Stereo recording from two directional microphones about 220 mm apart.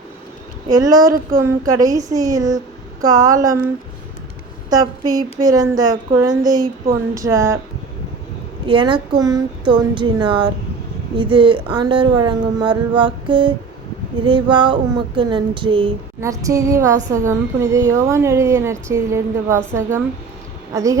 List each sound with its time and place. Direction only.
0.7 s a woman's voice: 15° right (ahead or behind)
4.7 s a woman's voice: 15° right (ahead or behind)
8.6 s a sound: 20° right (ahead or behind)
17.2 s a woman's voice: 15° right (ahead or behind)